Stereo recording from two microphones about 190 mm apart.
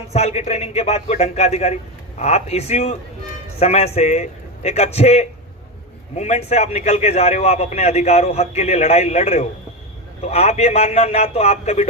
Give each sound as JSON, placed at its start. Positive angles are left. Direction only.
{"t": 0.1, "sound": "a man's voice", "side_deg": 35}